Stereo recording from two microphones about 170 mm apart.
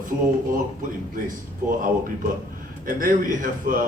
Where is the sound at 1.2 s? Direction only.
50° right (ahead or behind).